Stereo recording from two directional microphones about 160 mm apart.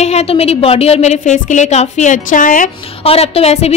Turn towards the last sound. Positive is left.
turn(degrees=40)  # may be behind; listen again after turning